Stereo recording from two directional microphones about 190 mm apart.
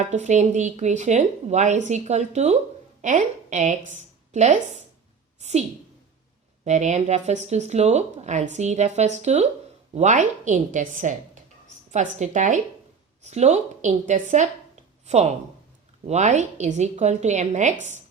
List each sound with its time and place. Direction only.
0.0 s a woman's voice: 40° right (ahead or behind)
6.7 s a woman's voice: 40° right (ahead or behind)